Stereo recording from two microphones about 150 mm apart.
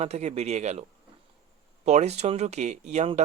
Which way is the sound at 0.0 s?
45° right (ahead or behind).